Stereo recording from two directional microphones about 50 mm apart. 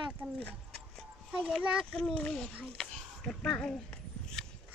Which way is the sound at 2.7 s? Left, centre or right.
Centre.